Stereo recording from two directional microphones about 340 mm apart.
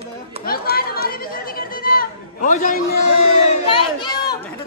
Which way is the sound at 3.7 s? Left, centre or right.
Centre.